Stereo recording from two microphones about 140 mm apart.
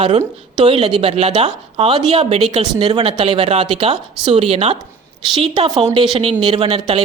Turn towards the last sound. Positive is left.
turn(degrees=-45)  # may be behind; listen again after turning